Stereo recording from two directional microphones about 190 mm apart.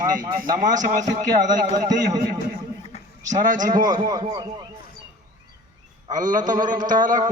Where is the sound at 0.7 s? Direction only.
20° right (ahead or behind).